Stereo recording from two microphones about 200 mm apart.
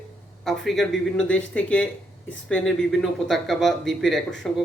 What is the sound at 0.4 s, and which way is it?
Speech, centre (ahead or behind).